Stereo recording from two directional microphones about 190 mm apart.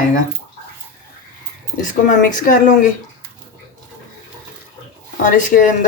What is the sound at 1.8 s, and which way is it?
Speech, 45° left (ahead or behind).